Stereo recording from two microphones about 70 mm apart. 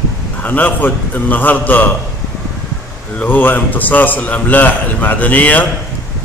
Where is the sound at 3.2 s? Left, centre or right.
Left.